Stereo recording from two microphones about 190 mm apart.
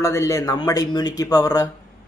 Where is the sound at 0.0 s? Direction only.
15° left (ahead or behind).